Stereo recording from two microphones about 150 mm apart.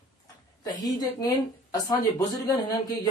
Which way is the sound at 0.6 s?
25° left (ahead or behind).